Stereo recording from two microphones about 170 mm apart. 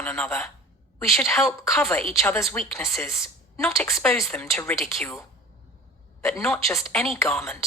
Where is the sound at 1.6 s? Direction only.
15° left (ahead or behind).